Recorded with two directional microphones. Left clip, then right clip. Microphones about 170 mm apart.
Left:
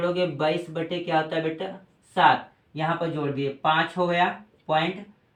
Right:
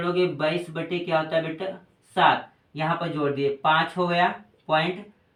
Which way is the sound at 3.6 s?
10° left (ahead or behind).